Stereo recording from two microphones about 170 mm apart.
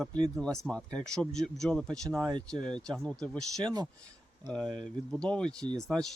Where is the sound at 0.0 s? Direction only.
5° left (ahead or behind).